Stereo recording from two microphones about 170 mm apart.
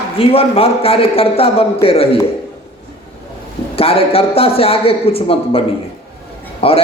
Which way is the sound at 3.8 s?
35° left (ahead or behind).